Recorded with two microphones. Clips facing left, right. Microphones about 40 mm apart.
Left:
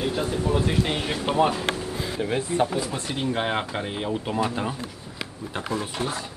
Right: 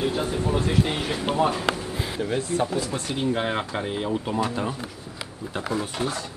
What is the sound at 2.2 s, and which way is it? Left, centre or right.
Speech, centre.